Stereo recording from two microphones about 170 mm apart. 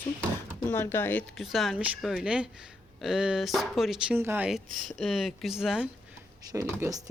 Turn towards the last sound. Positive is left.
turn(degrees=-20)  # may be behind; listen again after turning